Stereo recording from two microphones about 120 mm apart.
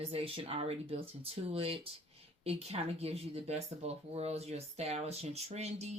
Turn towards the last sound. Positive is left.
turn(degrees=-65)  # may be behind; listen again after turning